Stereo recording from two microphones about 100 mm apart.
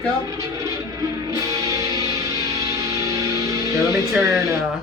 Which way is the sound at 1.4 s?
35° right (ahead or behind).